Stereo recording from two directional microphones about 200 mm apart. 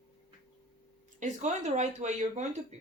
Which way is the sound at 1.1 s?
35° right (ahead or behind).